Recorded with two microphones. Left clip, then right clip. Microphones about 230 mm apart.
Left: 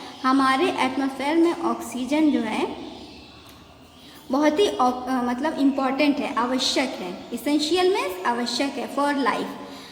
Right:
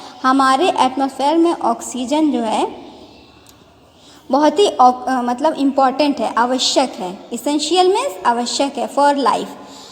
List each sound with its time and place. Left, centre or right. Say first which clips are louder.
0.2 s a woman's voice: right 7 dB; right
4.3 s a woman's voice: right 7 dB; right